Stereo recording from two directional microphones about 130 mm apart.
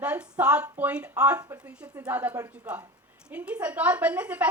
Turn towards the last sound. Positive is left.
turn(degrees=-10)  # may be behind; listen again after turning